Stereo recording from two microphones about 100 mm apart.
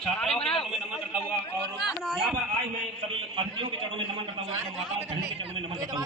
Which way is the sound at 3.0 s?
60° right (ahead or behind).